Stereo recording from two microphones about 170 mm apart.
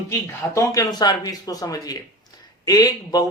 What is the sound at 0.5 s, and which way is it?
Speech, 20° left (ahead or behind).